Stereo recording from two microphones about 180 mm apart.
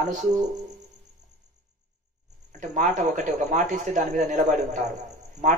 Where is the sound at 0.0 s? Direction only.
45° right (ahead or behind).